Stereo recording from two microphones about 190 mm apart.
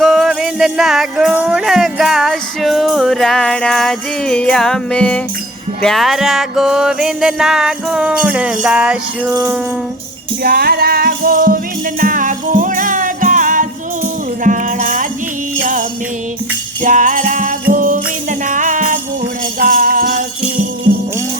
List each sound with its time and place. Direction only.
0.0 s music: centre (ahead or behind)
10.4 s music: 55° right (ahead or behind)
16.8 s music: 45° right (ahead or behind)